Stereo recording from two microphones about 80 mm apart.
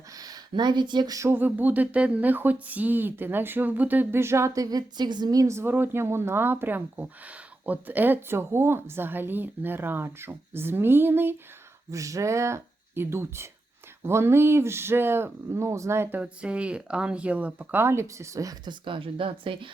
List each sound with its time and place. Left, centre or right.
0.1 s a sound: right
1.3 s speech: right
11.9 s speech: right
16.1 s speech: centre; by 18.5 s right
18.6 s speech: right